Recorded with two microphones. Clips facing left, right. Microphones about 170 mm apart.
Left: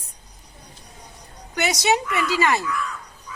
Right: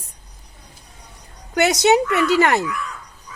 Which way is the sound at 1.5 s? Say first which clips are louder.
Right 6 dB; 60° right (ahead or behind).